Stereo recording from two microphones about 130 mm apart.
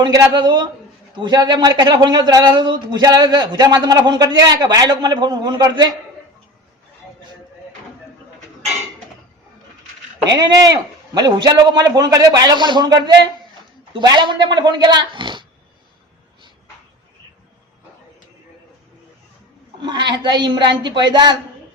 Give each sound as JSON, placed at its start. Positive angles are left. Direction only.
{"t": 0.0, "sound": "speech", "side_deg": -30}
{"t": 10.2, "sound": "speech", "side_deg": -30}
{"t": 19.8, "sound": "speech", "side_deg": -35}